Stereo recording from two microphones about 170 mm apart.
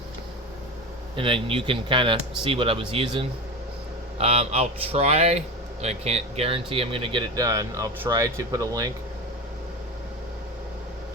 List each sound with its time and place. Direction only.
1.1 s speech: 30° right (ahead or behind)